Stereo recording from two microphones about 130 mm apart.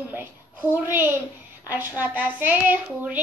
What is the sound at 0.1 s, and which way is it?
A woman's voice, 15° right (ahead or behind).